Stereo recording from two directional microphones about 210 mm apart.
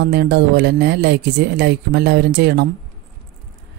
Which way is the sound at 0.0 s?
50° right (ahead or behind).